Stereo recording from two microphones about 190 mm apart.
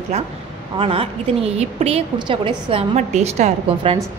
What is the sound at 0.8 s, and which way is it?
A woman's voice, 30° right (ahead or behind).